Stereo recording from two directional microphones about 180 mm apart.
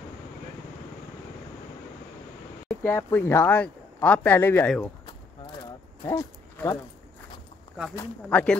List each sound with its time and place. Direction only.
2.8 s speech: 15° left (ahead or behind)
6.0 s speech: 15° left (ahead or behind)
8.3 s speech: 5° left (ahead or behind)